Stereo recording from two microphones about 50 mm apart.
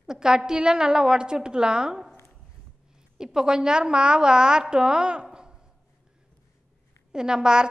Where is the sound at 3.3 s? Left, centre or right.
Centre.